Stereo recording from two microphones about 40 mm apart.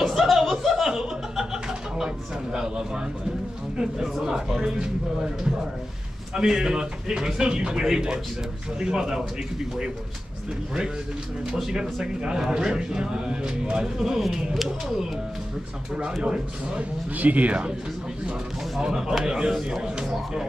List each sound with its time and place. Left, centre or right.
0.0 s chuckle: centre
2.0 s a sound: right
4.5 s a man's voice: centre
11.5 s a man's voice: centre
14.3 s a sound: centre
16.2 s speech: right
17.1 s speech: right
19.2 s a man's voice: centre